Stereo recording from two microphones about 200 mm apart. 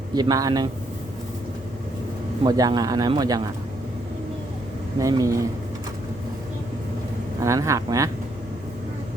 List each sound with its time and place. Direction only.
0.1 s a man's voice: 20° right (ahead or behind)
2.4 s a man's voice: 20° right (ahead or behind)
4.9 s speech: 15° right (ahead or behind)
7.4 s speech: 15° right (ahead or behind)